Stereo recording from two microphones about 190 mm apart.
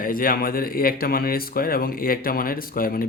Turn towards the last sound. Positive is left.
turn(degrees=50)  # may be behind; listen again after turning